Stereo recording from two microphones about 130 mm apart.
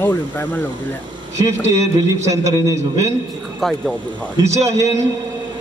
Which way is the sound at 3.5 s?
Centre (ahead or behind).